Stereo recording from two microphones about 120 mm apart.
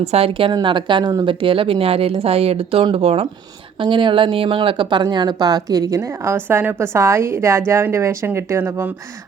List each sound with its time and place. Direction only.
0.0 s speech: 60° right (ahead or behind)
0.5 s a woman's voice: 40° right (ahead or behind)
3.8 s a woman's voice: 45° right (ahead or behind); by 8.9 s 20° right (ahead or behind)